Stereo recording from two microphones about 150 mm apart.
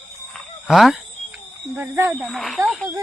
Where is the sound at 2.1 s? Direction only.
Centre (ahead or behind).